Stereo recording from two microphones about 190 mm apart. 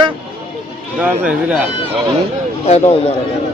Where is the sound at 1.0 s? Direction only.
10° right (ahead or behind).